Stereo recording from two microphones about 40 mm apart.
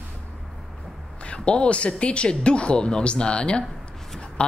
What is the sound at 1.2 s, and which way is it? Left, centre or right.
A woman's voice, left.